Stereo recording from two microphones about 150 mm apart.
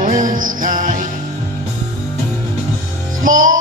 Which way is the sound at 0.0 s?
60° right (ahead or behind).